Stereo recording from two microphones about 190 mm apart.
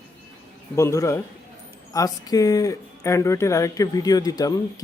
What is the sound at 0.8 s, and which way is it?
Speech, 15° left (ahead or behind).